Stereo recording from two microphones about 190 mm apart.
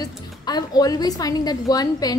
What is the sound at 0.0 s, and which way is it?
A woman's voice, 20° left (ahead or behind).